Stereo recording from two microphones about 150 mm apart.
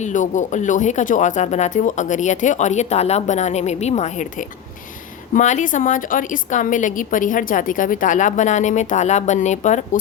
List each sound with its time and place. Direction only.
0.0 s a woman's voice: 55° left (ahead or behind)